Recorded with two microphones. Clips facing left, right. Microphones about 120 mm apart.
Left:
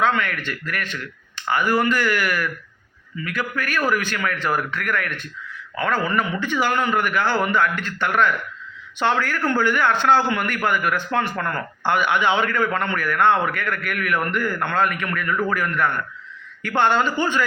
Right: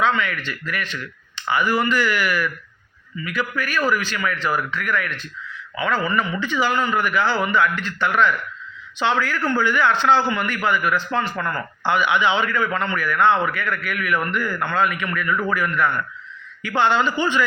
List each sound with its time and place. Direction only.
0.0 s a man's voice: 50° left (ahead or behind)